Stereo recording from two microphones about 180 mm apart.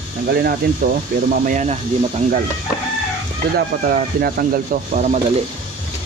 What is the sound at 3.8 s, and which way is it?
Speech, 55° right (ahead or behind).